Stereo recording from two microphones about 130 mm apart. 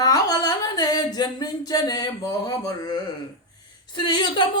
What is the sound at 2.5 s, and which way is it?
Speech, 30° left (ahead or behind).